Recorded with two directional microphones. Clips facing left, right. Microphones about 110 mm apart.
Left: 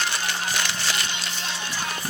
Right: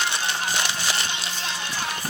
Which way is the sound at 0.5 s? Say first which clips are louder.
Right 1 dB; 20° right (ahead or behind).